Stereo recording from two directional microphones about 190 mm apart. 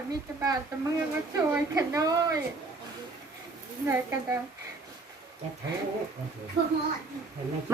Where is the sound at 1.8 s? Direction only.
20° right (ahead or behind).